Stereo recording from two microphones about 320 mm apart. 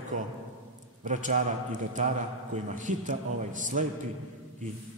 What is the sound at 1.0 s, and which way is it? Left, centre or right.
A man's voice, right.